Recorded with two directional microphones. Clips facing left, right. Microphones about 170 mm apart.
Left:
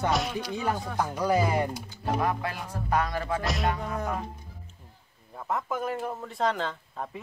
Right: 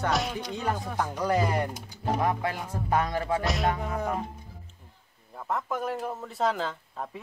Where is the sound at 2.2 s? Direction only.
25° right (ahead or behind).